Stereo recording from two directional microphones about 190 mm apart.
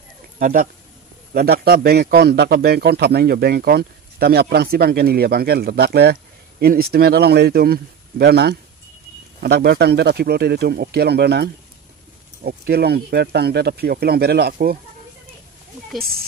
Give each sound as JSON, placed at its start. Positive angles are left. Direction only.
{"t": 0.4, "sound": "a man's voice", "side_deg": -45}